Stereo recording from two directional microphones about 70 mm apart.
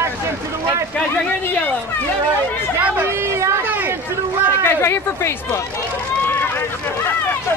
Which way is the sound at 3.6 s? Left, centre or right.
Right.